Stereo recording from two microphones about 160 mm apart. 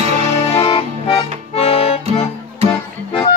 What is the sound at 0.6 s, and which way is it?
Accordion, 35° left (ahead or behind).